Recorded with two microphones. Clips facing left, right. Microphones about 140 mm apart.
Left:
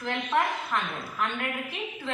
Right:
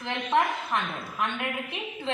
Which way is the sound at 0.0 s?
20° right (ahead or behind).